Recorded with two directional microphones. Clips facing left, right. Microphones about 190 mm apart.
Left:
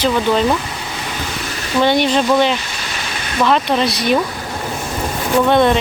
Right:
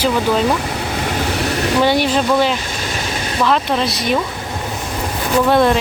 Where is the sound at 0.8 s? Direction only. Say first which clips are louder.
Right 6 dB; 60° right (ahead or behind).